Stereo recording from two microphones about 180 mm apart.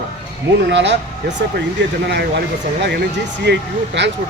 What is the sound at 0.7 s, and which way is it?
Speech, 75° right (ahead or behind).